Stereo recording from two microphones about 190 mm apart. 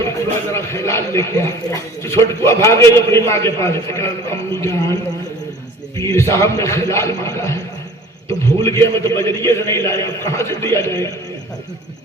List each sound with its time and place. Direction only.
0.5 s a man's voice: 15° left (ahead or behind)
6.0 s a man's voice: 15° left (ahead or behind)